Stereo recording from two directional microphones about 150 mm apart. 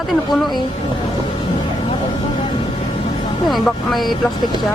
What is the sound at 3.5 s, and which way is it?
Speech, centre (ahead or behind).